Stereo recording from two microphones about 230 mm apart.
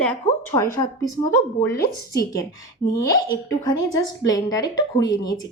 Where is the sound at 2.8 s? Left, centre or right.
Left.